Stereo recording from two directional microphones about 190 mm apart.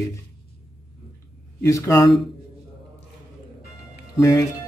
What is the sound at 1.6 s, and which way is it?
Speech, 15° left (ahead or behind).